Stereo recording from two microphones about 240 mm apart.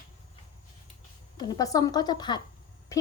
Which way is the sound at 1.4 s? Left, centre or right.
Centre.